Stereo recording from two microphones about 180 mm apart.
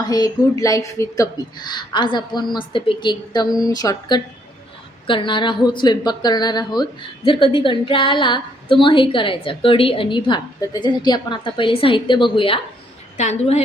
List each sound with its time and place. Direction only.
0.0 s a woman's voice: 20° left (ahead or behind)
13.1 s a woman's voice: 40° left (ahead or behind)